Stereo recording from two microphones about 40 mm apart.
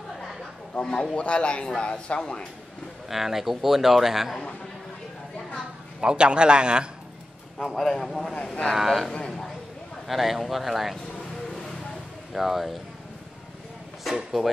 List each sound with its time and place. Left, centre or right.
0.7 s a man's voice: centre
3.1 s a man's voice: centre
5.9 s a man's voice: right
7.7 s speech: centre
8.7 s a man's voice: centre
12.3 s speech: centre